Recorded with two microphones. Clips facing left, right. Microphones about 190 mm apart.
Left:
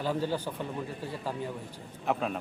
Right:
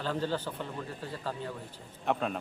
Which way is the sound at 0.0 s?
10° left (ahead or behind).